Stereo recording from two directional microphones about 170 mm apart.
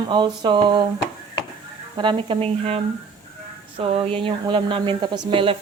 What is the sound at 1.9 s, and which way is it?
Speech, 30° right (ahead or behind).